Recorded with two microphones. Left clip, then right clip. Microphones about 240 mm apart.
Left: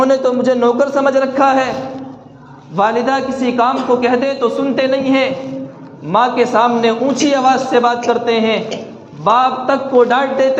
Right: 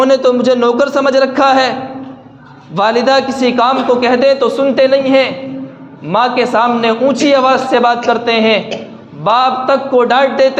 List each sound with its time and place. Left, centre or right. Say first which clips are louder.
0.0 s a man's voice: right 3 dB; right
2.7 s a man's voice: right 4 dB; right